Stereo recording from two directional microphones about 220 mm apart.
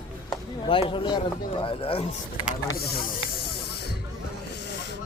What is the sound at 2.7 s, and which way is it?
Speech, 45° left (ahead or behind).